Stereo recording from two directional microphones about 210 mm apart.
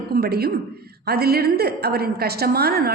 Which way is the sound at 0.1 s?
50° right (ahead or behind).